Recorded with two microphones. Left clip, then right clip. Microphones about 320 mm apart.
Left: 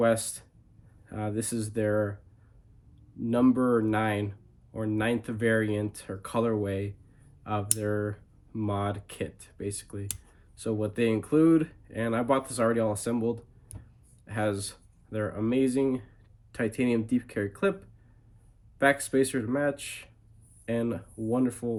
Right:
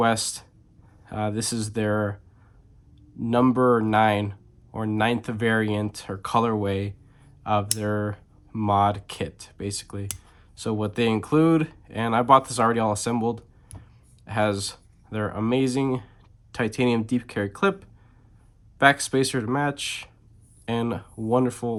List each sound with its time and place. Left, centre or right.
0.0 s speech: centre
3.2 s speech: centre
18.8 s speech: centre